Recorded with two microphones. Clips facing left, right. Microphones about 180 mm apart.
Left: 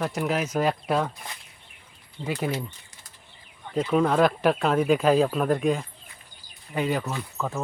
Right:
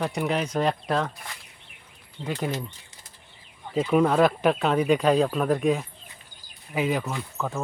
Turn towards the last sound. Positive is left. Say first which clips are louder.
# even
turn(degrees=-5)  # may be behind; listen again after turning